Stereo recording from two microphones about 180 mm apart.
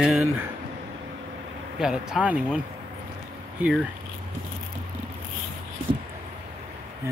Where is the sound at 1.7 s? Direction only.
5° right (ahead or behind).